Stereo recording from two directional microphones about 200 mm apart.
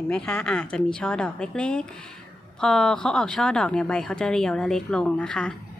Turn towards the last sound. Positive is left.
turn(degrees=5)  # may be behind; listen again after turning